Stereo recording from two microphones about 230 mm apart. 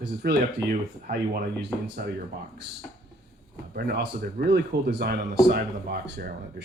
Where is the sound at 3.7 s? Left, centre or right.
Right.